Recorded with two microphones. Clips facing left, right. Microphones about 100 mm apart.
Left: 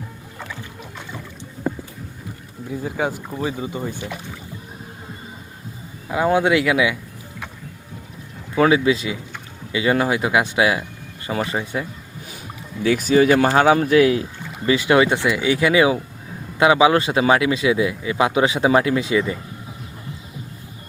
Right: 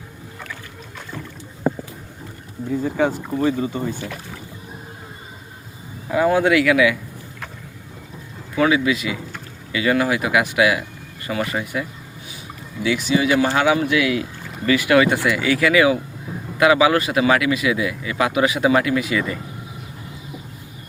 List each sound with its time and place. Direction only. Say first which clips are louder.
3.2 s speech: right 5 dB; 10° left (ahead or behind)
6.1 s speech: right 1 dB; 20° left (ahead or behind)
8.5 s speech: left 2 dB; 30° left (ahead or behind)
12.8 s speech: left 4 dB; 40° left (ahead or behind)
14.5 s speech: even; 25° left (ahead or behind)